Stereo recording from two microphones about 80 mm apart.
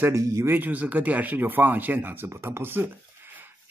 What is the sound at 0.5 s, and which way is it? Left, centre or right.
Speech, right.